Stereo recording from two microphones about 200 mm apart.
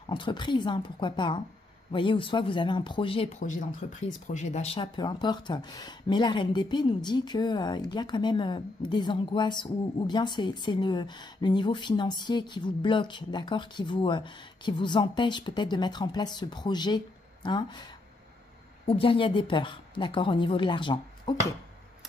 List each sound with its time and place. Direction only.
0.1 s speech: 25° left (ahead or behind)
18.9 s speech: 25° left (ahead or behind)